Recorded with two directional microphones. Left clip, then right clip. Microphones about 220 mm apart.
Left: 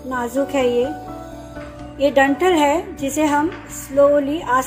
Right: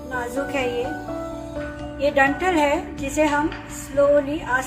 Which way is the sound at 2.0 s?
25° left (ahead or behind).